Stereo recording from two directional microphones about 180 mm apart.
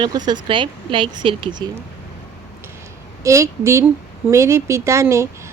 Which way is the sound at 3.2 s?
15° right (ahead or behind).